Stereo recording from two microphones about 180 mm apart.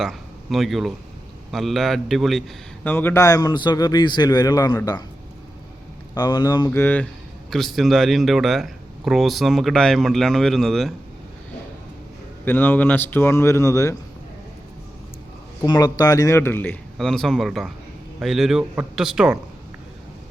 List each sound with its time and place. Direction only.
0.0 s speech: centre (ahead or behind)
2.8 s a man's voice: 10° left (ahead or behind)
6.1 s a man's voice: 25° left (ahead or behind)
6.7 s speech: 10° left (ahead or behind)
12.5 s speech: 10° left (ahead or behind)
15.6 s speech: 20° left (ahead or behind); by 19.4 s 5° right (ahead or behind)